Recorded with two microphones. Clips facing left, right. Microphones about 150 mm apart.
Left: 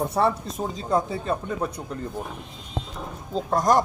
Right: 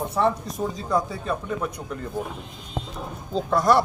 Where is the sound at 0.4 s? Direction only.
25° left (ahead or behind).